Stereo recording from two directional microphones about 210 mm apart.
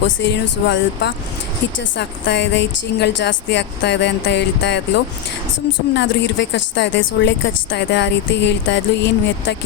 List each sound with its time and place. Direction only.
0.2 s a woman's voice: 55° left (ahead or behind)
5.9 s a woman's voice: 55° left (ahead or behind)